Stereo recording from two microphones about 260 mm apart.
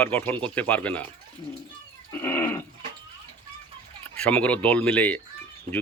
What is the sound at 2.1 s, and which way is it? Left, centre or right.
Speech, centre.